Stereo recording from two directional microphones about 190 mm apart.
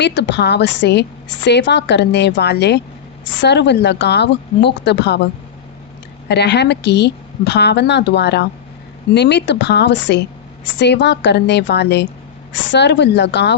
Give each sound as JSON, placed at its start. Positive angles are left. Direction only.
{"t": 0.0, "sound": "a woman's voice", "side_deg": 65}
{"t": 6.2, "sound": "a woman's voice", "side_deg": 60}